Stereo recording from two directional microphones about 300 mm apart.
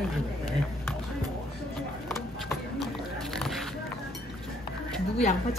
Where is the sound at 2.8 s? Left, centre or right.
Centre.